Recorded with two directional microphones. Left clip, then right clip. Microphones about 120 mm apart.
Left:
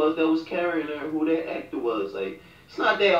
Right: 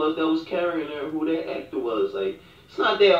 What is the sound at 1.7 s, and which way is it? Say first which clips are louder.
Speech: right 2 dB; 20° left (ahead or behind).